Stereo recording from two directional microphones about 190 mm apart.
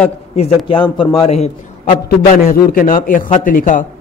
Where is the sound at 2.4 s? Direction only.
50° left (ahead or behind).